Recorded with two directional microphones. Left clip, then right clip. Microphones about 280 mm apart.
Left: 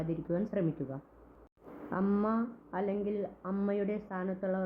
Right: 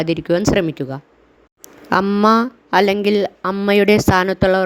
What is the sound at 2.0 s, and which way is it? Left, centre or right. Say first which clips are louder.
Speech: right 17 dB; right.